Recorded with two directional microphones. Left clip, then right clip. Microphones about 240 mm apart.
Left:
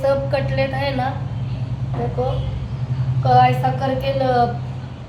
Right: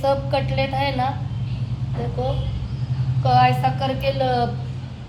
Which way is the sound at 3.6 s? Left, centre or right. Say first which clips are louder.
Left 1 dB; right.